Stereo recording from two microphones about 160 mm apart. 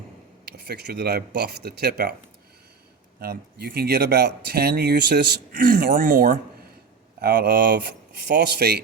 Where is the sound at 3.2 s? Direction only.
75° right (ahead or behind).